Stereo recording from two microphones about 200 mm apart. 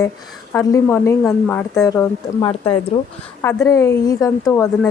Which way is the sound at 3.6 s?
15° left (ahead or behind).